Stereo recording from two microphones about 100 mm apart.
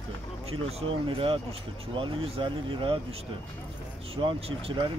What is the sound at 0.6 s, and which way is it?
Speech, 75° right (ahead or behind).